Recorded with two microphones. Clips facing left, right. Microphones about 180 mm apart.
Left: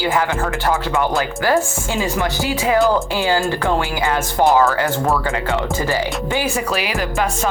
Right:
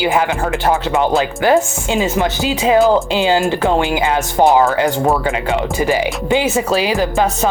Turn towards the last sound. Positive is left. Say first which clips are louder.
# right 5 dB
turn(degrees=-30)  # may be behind; listen again after turning